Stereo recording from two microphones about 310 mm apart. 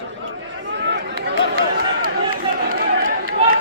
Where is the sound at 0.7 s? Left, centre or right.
Right.